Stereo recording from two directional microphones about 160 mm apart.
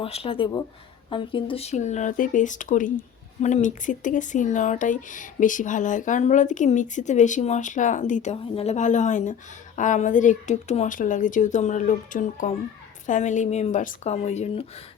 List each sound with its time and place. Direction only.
0.0 s speech: 35° left (ahead or behind)